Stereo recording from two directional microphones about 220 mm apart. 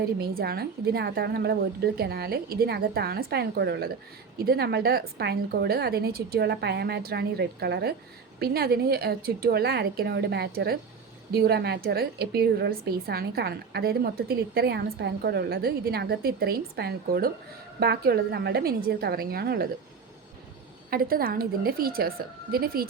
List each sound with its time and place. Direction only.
0.2 s a woman's voice: 45° right (ahead or behind)
20.9 s a woman's voice: 40° right (ahead or behind)